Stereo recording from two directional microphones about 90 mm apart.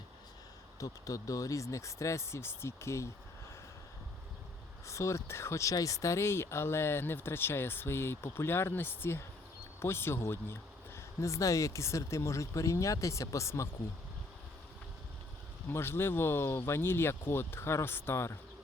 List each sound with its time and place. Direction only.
0.8 s speech: 40° left (ahead or behind)
4.9 s speech: 35° left (ahead or behind)
15.7 s speech: 25° left (ahead or behind)